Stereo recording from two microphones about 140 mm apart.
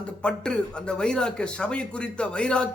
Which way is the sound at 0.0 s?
5° left (ahead or behind).